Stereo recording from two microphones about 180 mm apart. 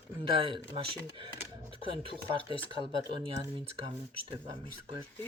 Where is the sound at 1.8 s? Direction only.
30° right (ahead or behind).